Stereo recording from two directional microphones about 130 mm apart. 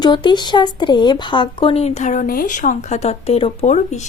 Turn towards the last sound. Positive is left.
turn(degrees=60)  # may be behind; listen again after turning